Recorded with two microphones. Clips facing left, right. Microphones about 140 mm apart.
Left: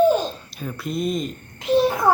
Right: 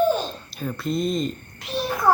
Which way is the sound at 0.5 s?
5° left (ahead or behind).